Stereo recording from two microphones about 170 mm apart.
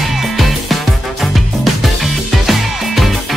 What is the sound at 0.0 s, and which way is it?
Music, centre (ahead or behind).